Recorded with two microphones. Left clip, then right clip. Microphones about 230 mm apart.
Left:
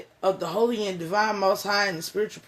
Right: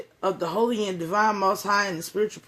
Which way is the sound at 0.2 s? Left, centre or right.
Right.